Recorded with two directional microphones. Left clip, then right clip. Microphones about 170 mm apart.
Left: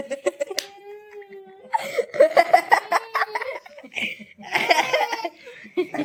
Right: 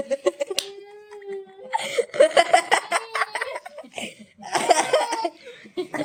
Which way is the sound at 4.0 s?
45° right (ahead or behind).